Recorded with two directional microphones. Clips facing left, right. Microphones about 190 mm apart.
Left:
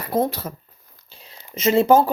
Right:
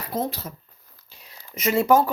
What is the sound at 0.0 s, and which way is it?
Speech, 55° left (ahead or behind).